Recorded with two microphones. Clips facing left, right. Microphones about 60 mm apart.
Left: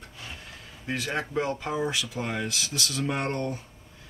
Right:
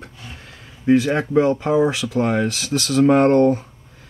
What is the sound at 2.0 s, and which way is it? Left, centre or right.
Speech, right.